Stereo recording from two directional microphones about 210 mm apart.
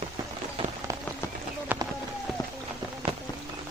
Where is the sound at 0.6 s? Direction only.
25° right (ahead or behind).